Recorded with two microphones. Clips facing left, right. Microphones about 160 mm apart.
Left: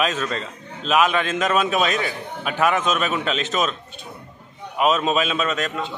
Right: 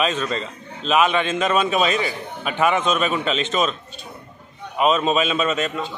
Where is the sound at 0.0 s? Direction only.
Centre (ahead or behind).